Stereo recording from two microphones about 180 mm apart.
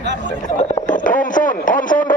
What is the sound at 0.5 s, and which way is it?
Speech, 45° left (ahead or behind).